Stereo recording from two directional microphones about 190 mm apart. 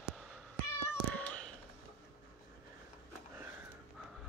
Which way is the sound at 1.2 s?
5° left (ahead or behind).